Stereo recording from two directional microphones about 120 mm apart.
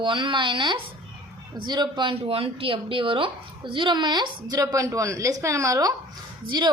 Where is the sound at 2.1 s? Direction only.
50° right (ahead or behind).